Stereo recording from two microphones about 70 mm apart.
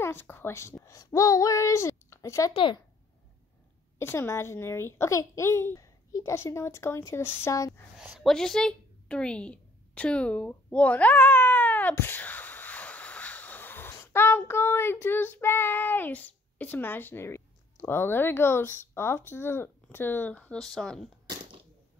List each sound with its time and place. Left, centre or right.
0.0 s child singing: left
0.8 s speech: left
4.0 s child singing: left
8.2 s a woman's voice: centre; by 11.9 s left
11.9 s a sound: left
14.5 s child singing: left
20.5 s speech: centre